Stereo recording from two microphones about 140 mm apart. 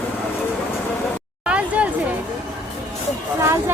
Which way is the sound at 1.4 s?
10° right (ahead or behind).